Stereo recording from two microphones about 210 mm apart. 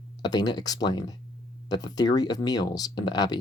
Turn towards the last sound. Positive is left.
turn(degrees=20)  # may be behind; listen again after turning